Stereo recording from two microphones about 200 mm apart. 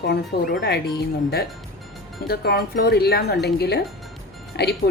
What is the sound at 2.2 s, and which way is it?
Speech, 50° left (ahead or behind).